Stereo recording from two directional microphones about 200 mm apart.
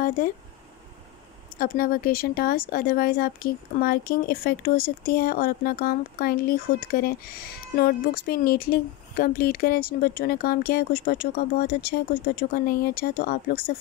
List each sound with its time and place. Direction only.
1.6 s speech: 45° left (ahead or behind)